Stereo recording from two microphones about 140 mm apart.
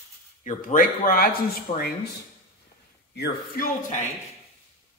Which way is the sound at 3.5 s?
75° left (ahead or behind).